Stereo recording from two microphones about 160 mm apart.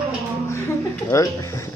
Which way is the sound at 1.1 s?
20° left (ahead or behind).